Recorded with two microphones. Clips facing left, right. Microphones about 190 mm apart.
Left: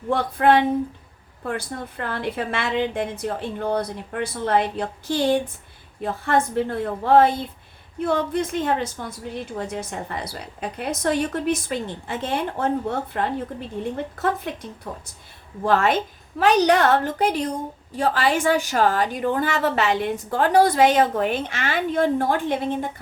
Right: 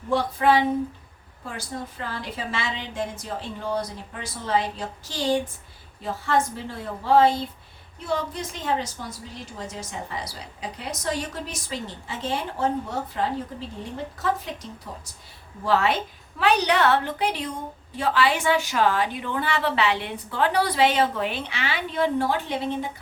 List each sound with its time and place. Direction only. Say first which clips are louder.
0.1 s a woman's voice: left 3 dB; 55° left (ahead or behind)